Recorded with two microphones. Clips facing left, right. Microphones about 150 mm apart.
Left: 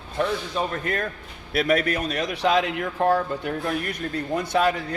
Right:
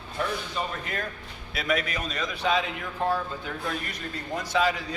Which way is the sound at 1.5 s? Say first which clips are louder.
Left 7 dB; 60° left (ahead or behind).